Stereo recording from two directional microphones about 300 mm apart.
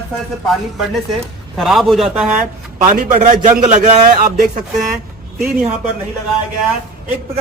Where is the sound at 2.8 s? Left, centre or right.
Right.